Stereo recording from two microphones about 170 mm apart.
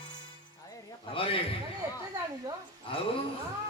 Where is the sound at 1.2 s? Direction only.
35° left (ahead or behind).